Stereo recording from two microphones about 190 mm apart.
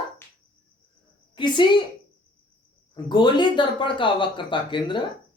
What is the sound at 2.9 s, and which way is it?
Speech, 25° left (ahead or behind).